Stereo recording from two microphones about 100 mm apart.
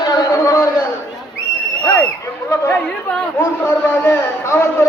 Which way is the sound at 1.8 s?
15° left (ahead or behind).